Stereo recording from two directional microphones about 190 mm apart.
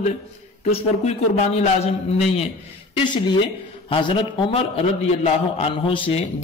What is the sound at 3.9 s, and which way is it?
A man's voice, 25° left (ahead or behind).